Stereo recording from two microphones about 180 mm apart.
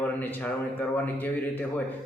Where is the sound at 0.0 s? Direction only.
10° left (ahead or behind).